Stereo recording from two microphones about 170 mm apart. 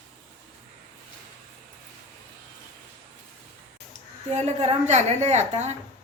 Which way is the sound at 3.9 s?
40° right (ahead or behind).